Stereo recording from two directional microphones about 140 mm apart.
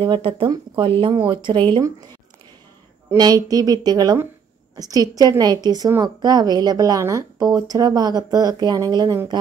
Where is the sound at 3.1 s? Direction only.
25° right (ahead or behind).